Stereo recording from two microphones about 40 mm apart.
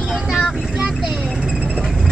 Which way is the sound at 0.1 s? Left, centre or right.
Centre.